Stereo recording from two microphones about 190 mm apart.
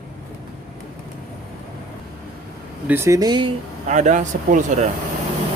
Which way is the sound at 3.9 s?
40° right (ahead or behind).